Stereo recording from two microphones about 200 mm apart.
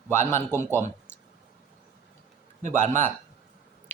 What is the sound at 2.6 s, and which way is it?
Speech, 35° right (ahead or behind).